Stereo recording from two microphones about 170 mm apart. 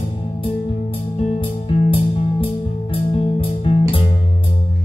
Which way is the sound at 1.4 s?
30° left (ahead or behind).